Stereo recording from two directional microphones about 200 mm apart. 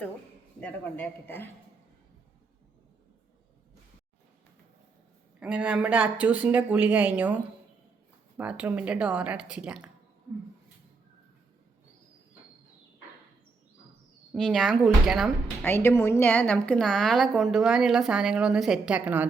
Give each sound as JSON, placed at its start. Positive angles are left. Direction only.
{"t": 0.6, "sound": "speech", "side_deg": 10}
{"t": 5.4, "sound": "speech", "side_deg": -5}
{"t": 8.4, "sound": "a woman's voice", "side_deg": -5}
{"t": 14.3, "sound": "a woman's voice", "side_deg": 0}
{"t": 15.6, "sound": "a woman's voice", "side_deg": 10}